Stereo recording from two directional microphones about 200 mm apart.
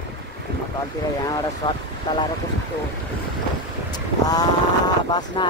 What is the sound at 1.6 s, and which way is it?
Speech, 25° left (ahead or behind).